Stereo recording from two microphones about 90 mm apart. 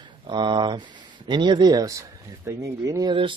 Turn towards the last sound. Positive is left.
turn(degrees=-65)  # may be behind; listen again after turning